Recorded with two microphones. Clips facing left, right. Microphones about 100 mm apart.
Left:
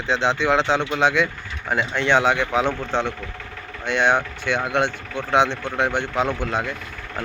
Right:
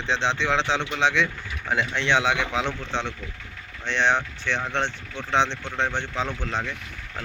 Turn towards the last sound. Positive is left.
turn(degrees=50)  # may be behind; listen again after turning